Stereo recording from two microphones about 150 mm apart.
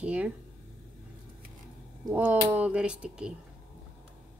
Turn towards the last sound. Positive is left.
turn(degrees=-5)  # may be behind; listen again after turning